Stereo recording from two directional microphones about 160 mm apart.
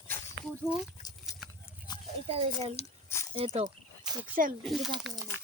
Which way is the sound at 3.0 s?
15° left (ahead or behind).